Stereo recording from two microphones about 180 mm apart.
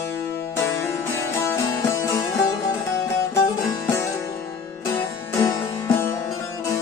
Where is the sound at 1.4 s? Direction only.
15° left (ahead or behind).